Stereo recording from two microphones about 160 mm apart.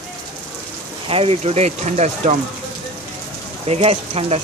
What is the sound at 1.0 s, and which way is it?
Speech, 35° right (ahead or behind).